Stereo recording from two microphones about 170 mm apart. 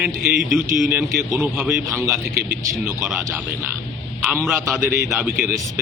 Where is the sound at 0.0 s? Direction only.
5° right (ahead or behind).